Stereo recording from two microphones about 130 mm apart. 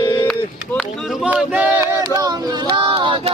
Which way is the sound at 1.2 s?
10° right (ahead or behind).